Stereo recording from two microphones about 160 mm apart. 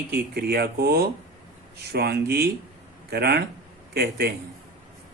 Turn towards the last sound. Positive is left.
turn(degrees=-75)  # may be behind; listen again after turning